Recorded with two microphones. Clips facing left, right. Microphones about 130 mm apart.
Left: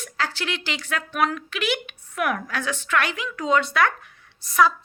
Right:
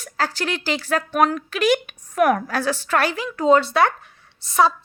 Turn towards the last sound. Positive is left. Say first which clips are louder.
# right 2 dB
turn(degrees=-30)  # may be behind; listen again after turning